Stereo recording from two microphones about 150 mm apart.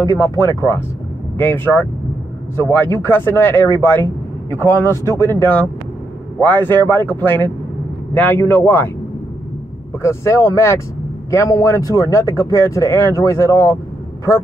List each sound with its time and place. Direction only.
0.0 s speech: 20° left (ahead or behind)
10.0 s speech: 20° left (ahead or behind)